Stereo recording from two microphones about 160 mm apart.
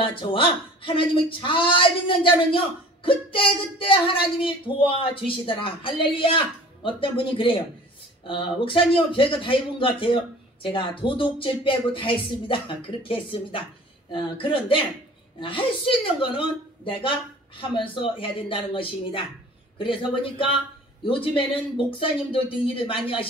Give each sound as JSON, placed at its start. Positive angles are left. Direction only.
{"t": 0.0, "sound": "speech", "side_deg": 30}